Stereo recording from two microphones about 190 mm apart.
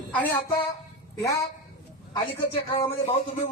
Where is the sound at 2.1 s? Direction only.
30° left (ahead or behind).